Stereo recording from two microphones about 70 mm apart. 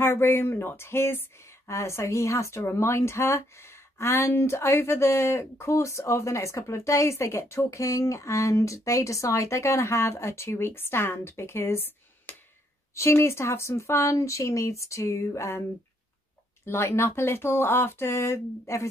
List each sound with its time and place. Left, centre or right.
0.0 s speech: left
16.6 s speech: left